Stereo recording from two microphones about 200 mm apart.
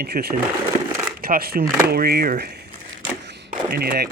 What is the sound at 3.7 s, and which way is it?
Speech, 50° right (ahead or behind).